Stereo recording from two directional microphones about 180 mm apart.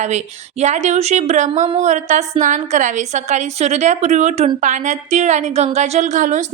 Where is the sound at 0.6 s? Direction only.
40° right (ahead or behind).